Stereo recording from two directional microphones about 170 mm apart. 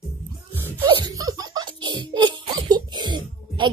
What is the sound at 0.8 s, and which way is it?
Laughter, 25° right (ahead or behind).